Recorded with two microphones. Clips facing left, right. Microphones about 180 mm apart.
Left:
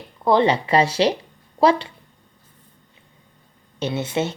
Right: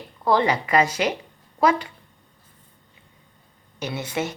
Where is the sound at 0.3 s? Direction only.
25° left (ahead or behind).